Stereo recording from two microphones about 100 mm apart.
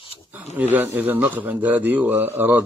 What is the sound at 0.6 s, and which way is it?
A man's voice, 20° right (ahead or behind).